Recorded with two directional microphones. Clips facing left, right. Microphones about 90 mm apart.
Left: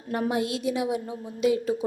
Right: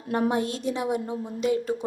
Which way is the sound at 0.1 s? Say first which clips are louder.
Right 2 dB; 35° right (ahead or behind).